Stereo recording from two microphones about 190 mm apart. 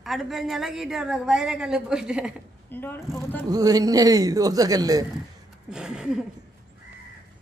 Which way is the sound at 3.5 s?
20° right (ahead or behind).